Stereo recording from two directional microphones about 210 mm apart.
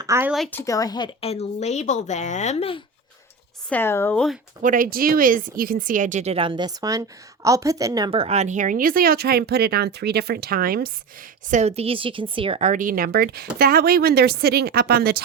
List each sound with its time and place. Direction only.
0.0 s a woman's voice: 10° right (ahead or behind)
0.3 s a woman's voice: centre (ahead or behind)
0.6 s a woman's voice: 15° left (ahead or behind)
3.7 s speech: 10° left (ahead or behind)
4.6 s speech: 40° right (ahead or behind)
11.5 s speech: 30° right (ahead or behind); by 15.2 s 50° right (ahead or behind)